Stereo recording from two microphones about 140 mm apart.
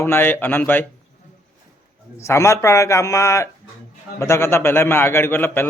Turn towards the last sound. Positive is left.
turn(degrees=15)  # may be behind; listen again after turning